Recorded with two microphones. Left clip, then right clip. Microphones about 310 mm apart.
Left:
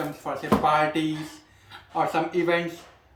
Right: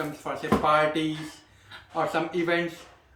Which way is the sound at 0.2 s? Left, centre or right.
Centre.